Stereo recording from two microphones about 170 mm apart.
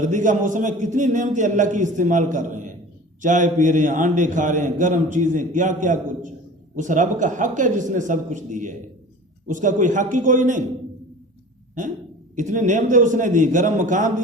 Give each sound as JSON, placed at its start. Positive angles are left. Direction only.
{"t": 0.0, "sound": "a man's voice", "side_deg": -50}
{"t": 11.8, "sound": "a man's voice", "side_deg": -45}